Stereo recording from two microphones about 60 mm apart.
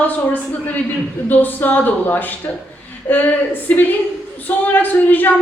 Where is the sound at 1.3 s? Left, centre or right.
Left.